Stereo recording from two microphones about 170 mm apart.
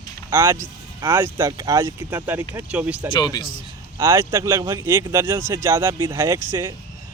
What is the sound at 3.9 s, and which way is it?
Speech, 15° right (ahead or behind).